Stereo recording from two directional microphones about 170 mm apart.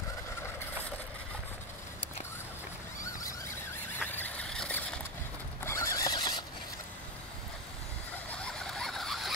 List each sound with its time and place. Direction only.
3.0 s neigh: 20° left (ahead or behind)
4.0 s vehicle: 10° left (ahead or behind)
5.6 s a sound: 15° left (ahead or behind)
8.4 s vehicle: 5° left (ahead or behind)